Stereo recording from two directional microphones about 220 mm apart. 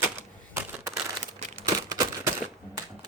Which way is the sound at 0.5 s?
10° right (ahead or behind).